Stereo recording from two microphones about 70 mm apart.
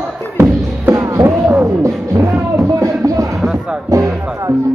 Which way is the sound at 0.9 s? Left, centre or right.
Right.